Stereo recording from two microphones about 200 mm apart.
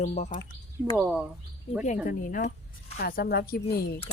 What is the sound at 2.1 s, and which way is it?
Speech, 45° left (ahead or behind).